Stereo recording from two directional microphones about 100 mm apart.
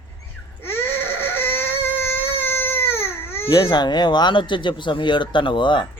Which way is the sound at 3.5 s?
45° left (ahead or behind).